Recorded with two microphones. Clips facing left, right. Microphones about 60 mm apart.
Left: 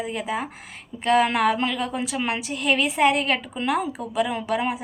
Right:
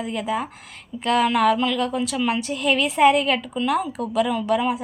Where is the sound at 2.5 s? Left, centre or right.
Centre.